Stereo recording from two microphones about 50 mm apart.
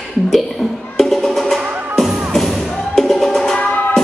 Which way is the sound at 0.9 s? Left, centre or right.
Centre.